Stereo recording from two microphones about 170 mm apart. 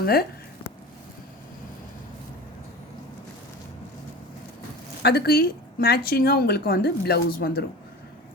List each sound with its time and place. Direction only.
0.0 s speech: 65° left (ahead or behind)
5.0 s a woman's voice: 70° left (ahead or behind)